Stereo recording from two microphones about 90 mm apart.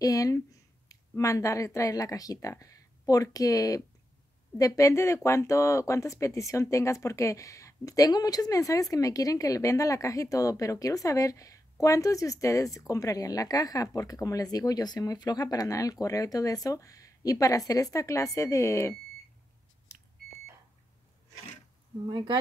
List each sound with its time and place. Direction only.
0.0 s speech: 40° left (ahead or behind)
22.1 s speech: 60° right (ahead or behind)